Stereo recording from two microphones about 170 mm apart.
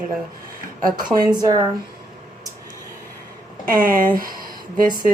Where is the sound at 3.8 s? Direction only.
55° right (ahead or behind).